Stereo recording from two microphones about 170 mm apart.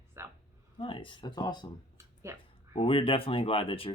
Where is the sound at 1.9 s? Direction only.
15° right (ahead or behind).